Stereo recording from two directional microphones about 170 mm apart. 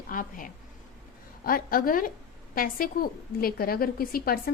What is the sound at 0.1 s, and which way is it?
A woman's voice, 55° left (ahead or behind).